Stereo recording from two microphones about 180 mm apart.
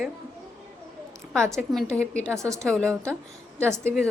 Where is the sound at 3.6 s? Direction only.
15° right (ahead or behind).